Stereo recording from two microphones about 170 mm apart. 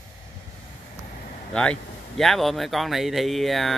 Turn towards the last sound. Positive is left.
turn(degrees=0)  # may be behind; listen again after turning